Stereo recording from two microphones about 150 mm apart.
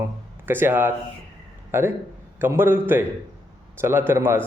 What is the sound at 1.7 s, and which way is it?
A man's voice, 15° right (ahead or behind).